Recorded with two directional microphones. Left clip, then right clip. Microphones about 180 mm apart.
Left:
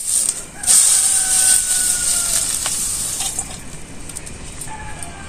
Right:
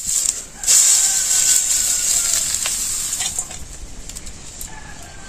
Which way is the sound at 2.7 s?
15° right (ahead or behind).